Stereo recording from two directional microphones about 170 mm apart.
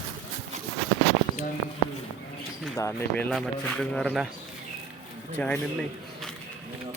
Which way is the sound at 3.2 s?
Centre (ahead or behind).